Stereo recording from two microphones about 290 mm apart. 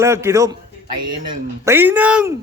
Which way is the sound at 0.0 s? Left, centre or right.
Centre.